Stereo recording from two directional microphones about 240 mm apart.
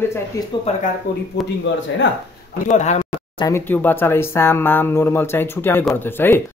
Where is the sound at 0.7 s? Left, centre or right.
Left.